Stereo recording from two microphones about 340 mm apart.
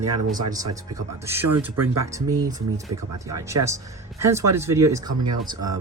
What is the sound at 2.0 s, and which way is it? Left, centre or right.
Speech, centre.